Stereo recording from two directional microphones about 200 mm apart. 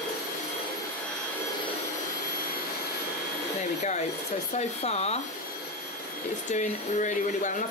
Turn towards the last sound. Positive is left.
turn(degrees=40)  # may be behind; listen again after turning